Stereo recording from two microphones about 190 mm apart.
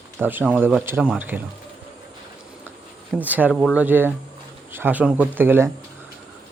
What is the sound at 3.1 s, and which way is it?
Speech, 10° right (ahead or behind).